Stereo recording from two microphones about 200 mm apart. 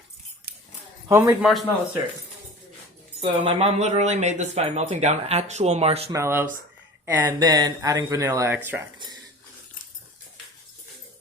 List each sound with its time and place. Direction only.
1.0 s speech: 15° right (ahead or behind)
3.2 s speech: 30° right (ahead or behind)
6.1 s speech: 10° right (ahead or behind)
7.3 s speech: 20° right (ahead or behind)